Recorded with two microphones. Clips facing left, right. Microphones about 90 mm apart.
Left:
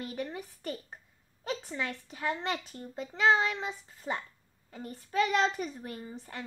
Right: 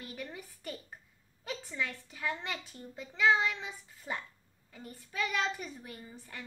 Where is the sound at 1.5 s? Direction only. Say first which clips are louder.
Left 3 dB; 40° left (ahead or behind).